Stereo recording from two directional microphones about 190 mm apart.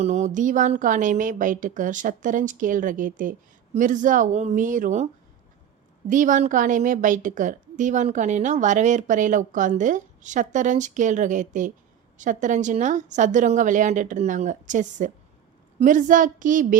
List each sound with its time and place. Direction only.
0.0 s a woman's voice: 40° right (ahead or behind)
6.1 s a woman's voice: 45° right (ahead or behind)